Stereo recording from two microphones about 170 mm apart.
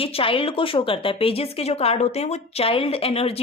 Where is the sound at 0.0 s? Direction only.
35° left (ahead or behind).